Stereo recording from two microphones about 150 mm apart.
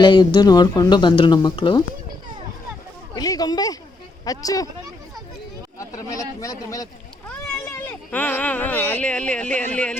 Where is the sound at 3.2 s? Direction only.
25° left (ahead or behind).